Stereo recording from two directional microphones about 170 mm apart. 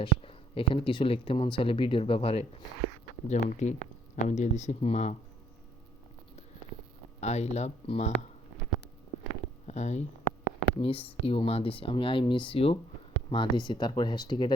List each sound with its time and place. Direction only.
0.0 s speech: 30° left (ahead or behind)
7.2 s speech: 40° left (ahead or behind)
9.6 s speech: 40° left (ahead or behind)